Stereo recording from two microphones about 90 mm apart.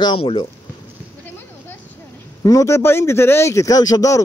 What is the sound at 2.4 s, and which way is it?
Speech, 40° left (ahead or behind).